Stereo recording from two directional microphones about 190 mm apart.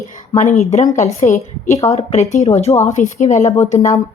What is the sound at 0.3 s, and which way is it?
Speech, 35° left (ahead or behind).